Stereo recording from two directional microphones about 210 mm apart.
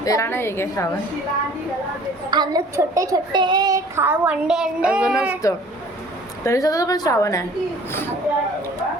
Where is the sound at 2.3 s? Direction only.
20° right (ahead or behind).